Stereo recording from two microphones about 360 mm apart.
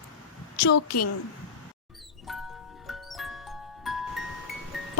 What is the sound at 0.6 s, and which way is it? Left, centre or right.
Speech, left.